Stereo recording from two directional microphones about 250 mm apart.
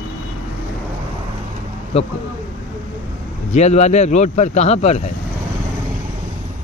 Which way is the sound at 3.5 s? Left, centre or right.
Left.